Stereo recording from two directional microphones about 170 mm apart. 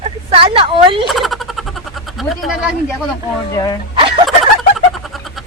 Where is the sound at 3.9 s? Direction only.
35° right (ahead or behind).